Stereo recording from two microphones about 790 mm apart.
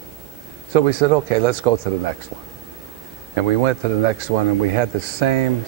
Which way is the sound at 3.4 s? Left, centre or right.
Right.